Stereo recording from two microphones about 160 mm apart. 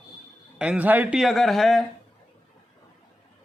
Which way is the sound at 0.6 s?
10° right (ahead or behind).